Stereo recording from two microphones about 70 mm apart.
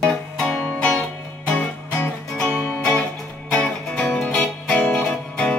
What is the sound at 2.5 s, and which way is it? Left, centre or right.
Music, left.